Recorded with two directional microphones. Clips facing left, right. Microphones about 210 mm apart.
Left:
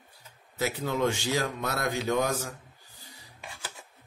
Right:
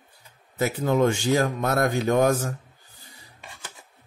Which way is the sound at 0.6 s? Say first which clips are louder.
Right 6 dB; 50° right (ahead or behind).